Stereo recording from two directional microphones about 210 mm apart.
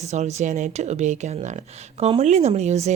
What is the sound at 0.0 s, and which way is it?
Speech, 30° right (ahead or behind).